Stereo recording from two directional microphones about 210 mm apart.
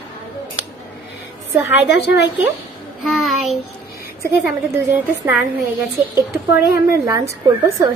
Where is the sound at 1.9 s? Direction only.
55° left (ahead or behind).